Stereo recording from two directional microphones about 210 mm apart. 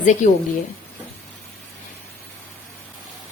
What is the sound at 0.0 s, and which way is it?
Speech, 35° left (ahead or behind).